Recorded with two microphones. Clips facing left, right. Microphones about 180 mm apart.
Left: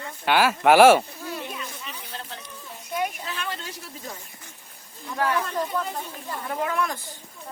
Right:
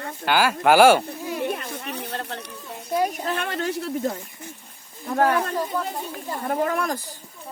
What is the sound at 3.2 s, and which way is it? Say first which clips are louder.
Speech: right 7 dB; 55° right (ahead or behind).